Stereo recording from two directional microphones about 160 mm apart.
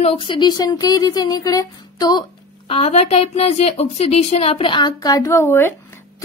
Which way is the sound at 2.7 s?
40° left (ahead or behind).